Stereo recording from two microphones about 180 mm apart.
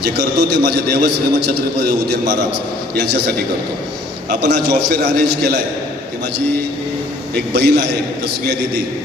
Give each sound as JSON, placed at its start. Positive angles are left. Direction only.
{"t": 0.0, "sound": "a man's voice", "side_deg": -65}
{"t": 4.4, "sound": "a man's voice", "side_deg": -65}
{"t": 7.5, "sound": "a man's voice", "side_deg": -65}